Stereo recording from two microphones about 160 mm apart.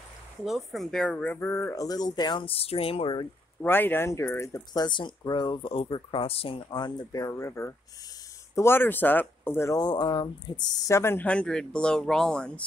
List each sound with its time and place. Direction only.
0.5 s speech: centre (ahead or behind); by 3.3 s 35° left (ahead or behind)
3.6 s speech: 15° left (ahead or behind)